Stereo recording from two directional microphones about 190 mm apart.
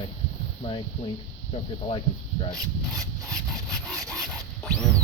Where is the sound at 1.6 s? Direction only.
30° left (ahead or behind).